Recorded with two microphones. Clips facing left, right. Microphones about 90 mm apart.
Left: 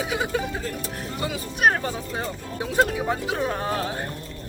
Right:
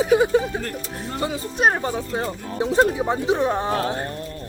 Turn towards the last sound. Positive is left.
turn(degrees=-20)  # may be behind; listen again after turning